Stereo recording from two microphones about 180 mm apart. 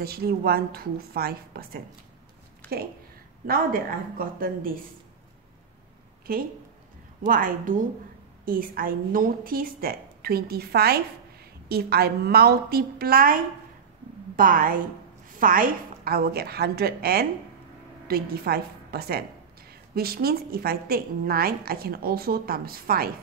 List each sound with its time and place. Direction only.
0.0 s a woman's voice: 60° right (ahead or behind)
3.4 s a woman's voice: 55° right (ahead or behind)
6.3 s a woman's voice: 55° right (ahead or behind)